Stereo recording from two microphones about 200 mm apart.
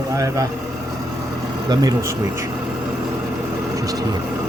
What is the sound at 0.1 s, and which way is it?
Speech, 15° right (ahead or behind).